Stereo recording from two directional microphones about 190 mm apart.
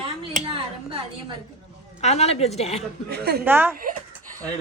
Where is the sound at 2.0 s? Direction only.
35° left (ahead or behind).